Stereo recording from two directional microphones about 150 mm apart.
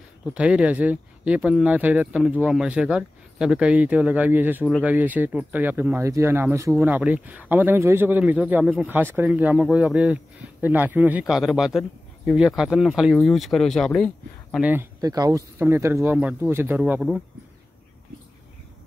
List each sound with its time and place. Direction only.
0.3 s speech: 5° right (ahead or behind)
14.6 s speech: 10° right (ahead or behind)
15.0 s speech: 25° right (ahead or behind); by 17.2 s 5° right (ahead or behind)